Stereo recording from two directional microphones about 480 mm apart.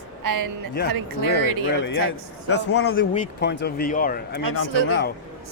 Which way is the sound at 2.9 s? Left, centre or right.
Centre.